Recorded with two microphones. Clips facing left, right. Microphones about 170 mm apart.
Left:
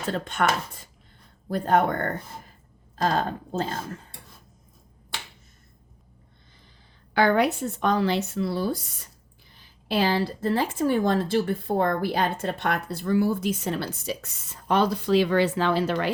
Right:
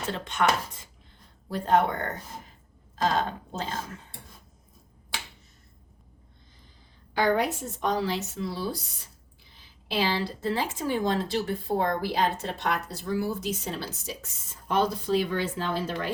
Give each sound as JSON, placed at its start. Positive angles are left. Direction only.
{"t": 0.1, "sound": "a woman's voice", "side_deg": 50}
{"t": 1.5, "sound": "a woman's voice", "side_deg": 50}
{"t": 7.1, "sound": "speech", "side_deg": 65}